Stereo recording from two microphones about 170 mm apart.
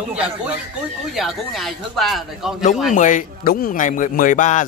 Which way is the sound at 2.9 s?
50° left (ahead or behind).